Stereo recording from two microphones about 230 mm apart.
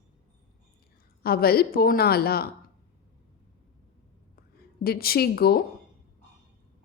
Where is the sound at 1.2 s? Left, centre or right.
Left.